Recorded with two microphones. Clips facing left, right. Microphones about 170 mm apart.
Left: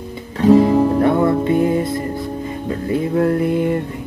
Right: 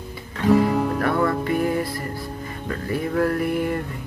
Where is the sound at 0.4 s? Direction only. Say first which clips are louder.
Left 7 dB; 30° left (ahead or behind).